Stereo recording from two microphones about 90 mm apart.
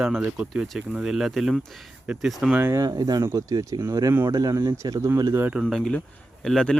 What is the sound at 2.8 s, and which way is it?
Speech, 45° right (ahead or behind).